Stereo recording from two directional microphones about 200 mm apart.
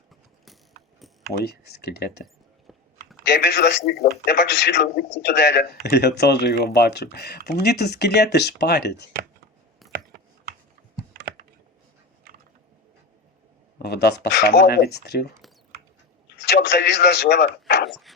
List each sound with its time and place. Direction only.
1.3 s speech: 55° left (ahead or behind)
3.2 s speech: 55° left (ahead or behind)
13.7 s speech: 55° left (ahead or behind)
16.4 s a sound: 55° left (ahead or behind)